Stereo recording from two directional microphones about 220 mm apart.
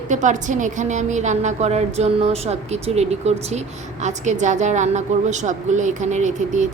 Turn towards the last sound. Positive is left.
turn(degrees=-35)  # may be behind; listen again after turning